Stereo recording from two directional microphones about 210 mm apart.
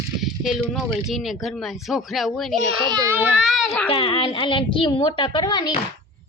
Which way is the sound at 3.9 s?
25° left (ahead or behind).